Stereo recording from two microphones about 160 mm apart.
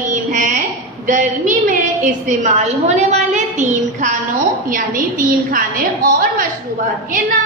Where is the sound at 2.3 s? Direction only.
40° right (ahead or behind).